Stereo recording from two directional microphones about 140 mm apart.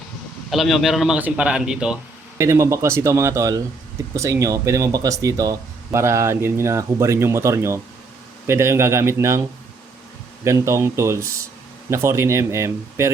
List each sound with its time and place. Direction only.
0.5 s a man's voice: centre (ahead or behind)
2.4 s speech: 20° right (ahead or behind)
10.4 s speech: 20° right (ahead or behind)